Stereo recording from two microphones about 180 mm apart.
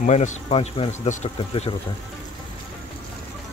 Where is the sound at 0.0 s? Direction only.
40° left (ahead or behind).